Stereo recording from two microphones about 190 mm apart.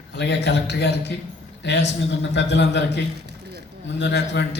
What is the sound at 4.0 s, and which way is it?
Speech, 65° left (ahead or behind).